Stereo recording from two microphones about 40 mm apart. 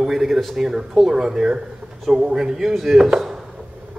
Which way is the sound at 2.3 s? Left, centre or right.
Centre.